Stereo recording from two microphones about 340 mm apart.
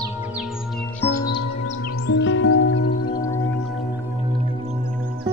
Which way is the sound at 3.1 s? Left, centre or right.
Centre.